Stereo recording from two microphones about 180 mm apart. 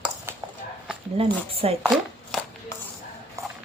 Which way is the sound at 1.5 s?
35° right (ahead or behind).